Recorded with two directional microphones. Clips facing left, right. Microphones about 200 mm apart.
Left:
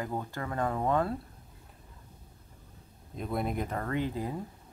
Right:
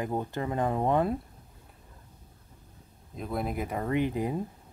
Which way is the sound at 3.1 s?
Centre (ahead or behind).